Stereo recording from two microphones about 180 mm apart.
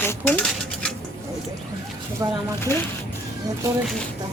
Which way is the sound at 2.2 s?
20° right (ahead or behind).